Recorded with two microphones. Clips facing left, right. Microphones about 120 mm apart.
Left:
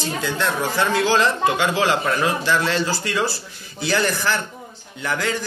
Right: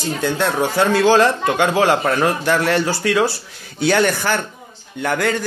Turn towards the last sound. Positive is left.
turn(degrees=-60)  # may be behind; listen again after turning